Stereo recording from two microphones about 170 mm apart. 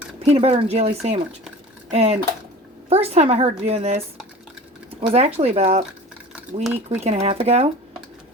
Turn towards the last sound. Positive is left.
turn(degrees=-35)  # may be behind; listen again after turning